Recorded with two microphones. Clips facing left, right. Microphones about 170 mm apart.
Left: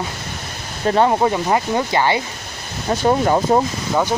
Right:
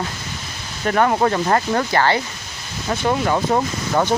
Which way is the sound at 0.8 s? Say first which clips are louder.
Left 2 dB; 25° left (ahead or behind).